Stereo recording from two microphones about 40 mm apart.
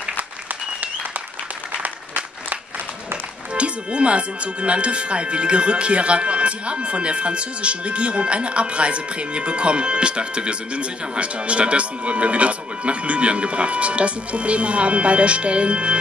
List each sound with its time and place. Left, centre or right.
1.8 s applause: right
3.5 s speech: right